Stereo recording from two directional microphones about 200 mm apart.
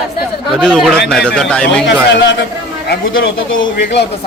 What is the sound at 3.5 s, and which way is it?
Speech, 65° left (ahead or behind).